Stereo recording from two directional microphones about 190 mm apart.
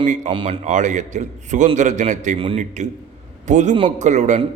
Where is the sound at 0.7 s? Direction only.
40° right (ahead or behind).